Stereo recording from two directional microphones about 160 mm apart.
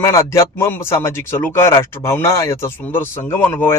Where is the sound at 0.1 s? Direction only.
15° left (ahead or behind).